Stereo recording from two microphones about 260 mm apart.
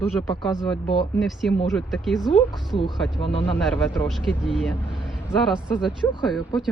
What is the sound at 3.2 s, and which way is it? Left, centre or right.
Speech, centre.